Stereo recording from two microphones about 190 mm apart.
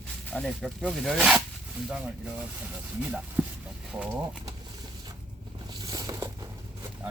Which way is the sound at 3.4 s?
5° right (ahead or behind).